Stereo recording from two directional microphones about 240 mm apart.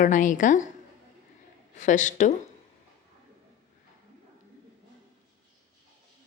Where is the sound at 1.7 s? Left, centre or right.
Left.